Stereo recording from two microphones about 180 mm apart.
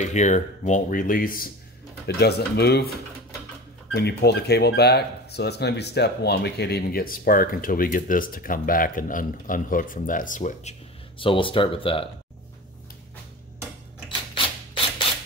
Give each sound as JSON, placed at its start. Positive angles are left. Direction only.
{"t": 0.0, "sound": "speech", "side_deg": 40}
{"t": 2.0, "sound": "speech", "side_deg": 65}
{"t": 3.9, "sound": "speech", "side_deg": 65}
{"t": 14.0, "sound": "a sound", "side_deg": 30}